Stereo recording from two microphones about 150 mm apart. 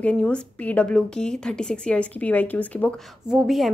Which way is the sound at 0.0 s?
5° left (ahead or behind).